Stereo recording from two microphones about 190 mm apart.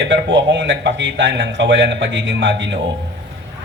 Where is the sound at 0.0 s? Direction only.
70° right (ahead or behind).